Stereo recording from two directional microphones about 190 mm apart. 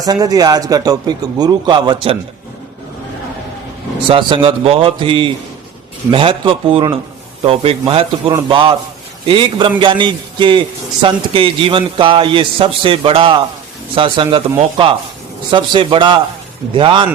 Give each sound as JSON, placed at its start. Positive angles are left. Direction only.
{"t": 0.0, "sound": "a man's voice", "side_deg": -20}
{"t": 4.1, "sound": "a man's voice", "side_deg": -25}